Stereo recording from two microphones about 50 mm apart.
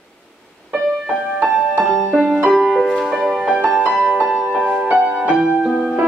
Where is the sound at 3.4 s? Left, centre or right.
Centre.